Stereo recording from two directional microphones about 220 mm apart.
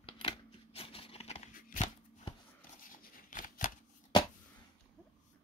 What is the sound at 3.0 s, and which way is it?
Scissors, 40° left (ahead or behind).